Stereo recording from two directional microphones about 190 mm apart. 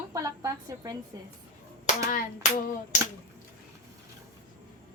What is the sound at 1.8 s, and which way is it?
Clapping, 45° left (ahead or behind).